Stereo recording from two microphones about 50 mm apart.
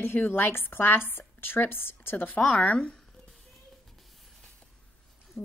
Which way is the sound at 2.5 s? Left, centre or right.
Left.